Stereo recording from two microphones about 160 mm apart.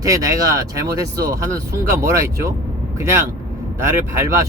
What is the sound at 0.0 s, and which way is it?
Speech, 20° right (ahead or behind).